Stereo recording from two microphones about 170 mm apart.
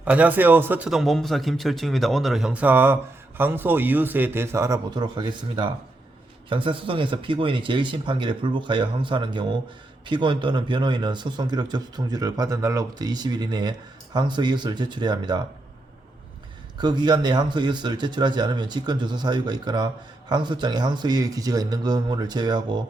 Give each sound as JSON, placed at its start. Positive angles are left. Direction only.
{"t": 0.0, "sound": "speech", "side_deg": -10}
{"t": 16.7, "sound": "speech", "side_deg": -25}